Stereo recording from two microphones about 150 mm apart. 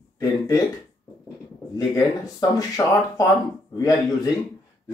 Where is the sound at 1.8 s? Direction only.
20° left (ahead or behind).